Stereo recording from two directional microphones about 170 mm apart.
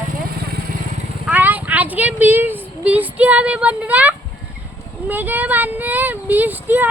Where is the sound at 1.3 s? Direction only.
10° right (ahead or behind).